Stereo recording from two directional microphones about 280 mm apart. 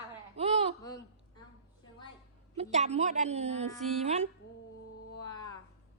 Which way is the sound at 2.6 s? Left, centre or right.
Right.